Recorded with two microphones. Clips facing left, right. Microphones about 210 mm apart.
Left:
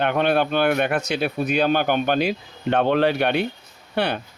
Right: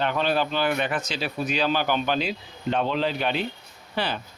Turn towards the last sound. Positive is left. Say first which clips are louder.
# left 5 dB
turn(degrees=65)  # may be behind; listen again after turning